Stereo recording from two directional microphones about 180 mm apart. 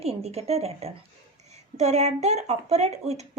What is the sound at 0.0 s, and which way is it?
A woman's voice, 35° right (ahead or behind).